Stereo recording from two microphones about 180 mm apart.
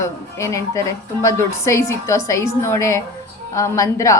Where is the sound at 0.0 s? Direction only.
15° left (ahead or behind).